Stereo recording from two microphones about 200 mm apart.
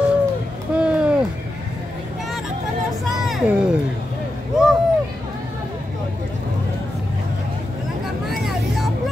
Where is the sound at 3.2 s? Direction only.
5° right (ahead or behind).